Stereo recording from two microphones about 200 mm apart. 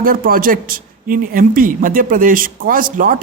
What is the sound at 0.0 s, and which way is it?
Speech, 45° right (ahead or behind).